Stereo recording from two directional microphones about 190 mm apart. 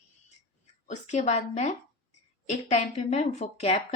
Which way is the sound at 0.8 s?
35° left (ahead or behind).